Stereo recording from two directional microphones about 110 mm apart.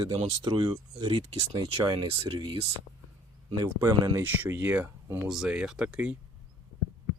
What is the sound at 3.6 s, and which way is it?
Speech, 30° right (ahead or behind).